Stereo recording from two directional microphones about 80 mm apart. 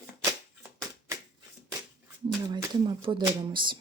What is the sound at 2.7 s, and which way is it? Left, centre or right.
Speech, right.